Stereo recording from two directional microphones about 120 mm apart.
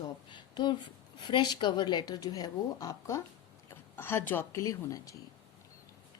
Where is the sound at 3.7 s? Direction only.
20° left (ahead or behind).